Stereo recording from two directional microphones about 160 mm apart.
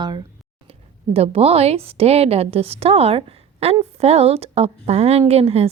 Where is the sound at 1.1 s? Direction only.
40° right (ahead or behind).